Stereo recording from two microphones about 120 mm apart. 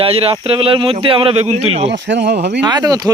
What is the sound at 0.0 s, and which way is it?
A man's voice, 50° right (ahead or behind).